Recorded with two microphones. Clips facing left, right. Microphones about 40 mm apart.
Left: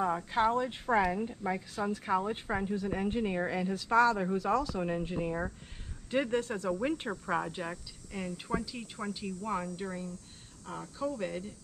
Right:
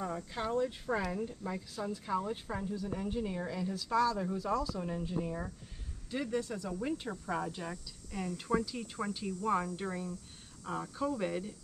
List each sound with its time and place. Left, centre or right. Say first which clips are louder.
0.0 s speech: left 9 dB; left; by 9.0 s centre
9.5 s speech: right 3 dB; centre
10.7 s speech: right 1 dB; centre